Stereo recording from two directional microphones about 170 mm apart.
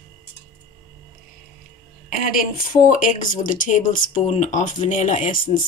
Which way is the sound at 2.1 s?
55° left (ahead or behind).